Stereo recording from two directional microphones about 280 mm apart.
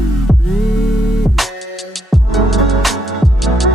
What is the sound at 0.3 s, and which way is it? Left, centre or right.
Music, centre.